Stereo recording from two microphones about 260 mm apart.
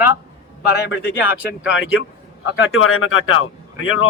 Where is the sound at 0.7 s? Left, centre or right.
Left.